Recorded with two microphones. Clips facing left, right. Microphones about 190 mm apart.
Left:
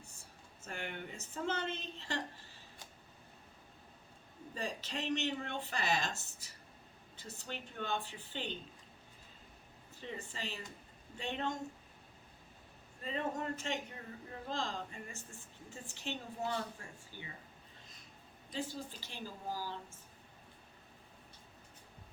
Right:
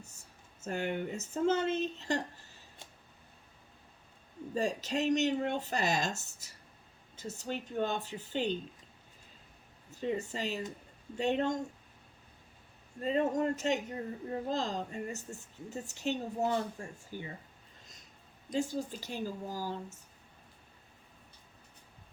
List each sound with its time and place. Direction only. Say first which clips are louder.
0.6 s speech: right 10 dB; 40° right (ahead or behind)
4.5 s a woman's voice: right 9 dB; 45° right (ahead or behind)
10.0 s a woman's voice: right 10 dB; 45° right (ahead or behind)
13.0 s a woman's voice: right 9 dB; 40° right (ahead or behind)
17.1 s speech: right 10 dB; 10° right (ahead or behind)
18.5 s speech: right 8 dB; 45° right (ahead or behind)